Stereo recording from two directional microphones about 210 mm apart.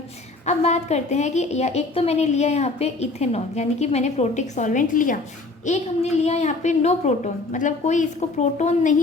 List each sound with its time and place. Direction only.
0.4 s a woman's voice: 30° left (ahead or behind)